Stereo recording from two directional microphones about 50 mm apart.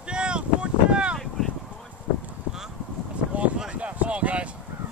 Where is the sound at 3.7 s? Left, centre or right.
Right.